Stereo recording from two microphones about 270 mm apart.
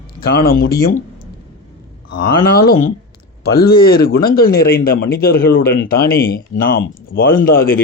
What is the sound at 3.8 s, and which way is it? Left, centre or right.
Speech, left.